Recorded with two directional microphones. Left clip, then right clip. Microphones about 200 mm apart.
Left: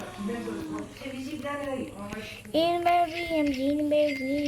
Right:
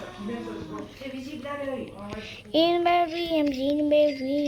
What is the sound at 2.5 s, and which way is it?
Child singing, 15° right (ahead or behind).